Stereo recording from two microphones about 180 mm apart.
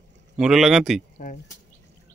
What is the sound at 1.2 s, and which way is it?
Speech, 45° left (ahead or behind).